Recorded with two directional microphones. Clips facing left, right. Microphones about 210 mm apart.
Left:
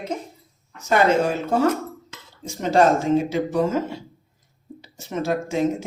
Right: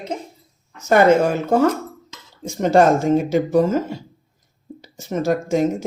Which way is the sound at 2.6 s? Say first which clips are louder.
Right 3 dB; 50° right (ahead or behind).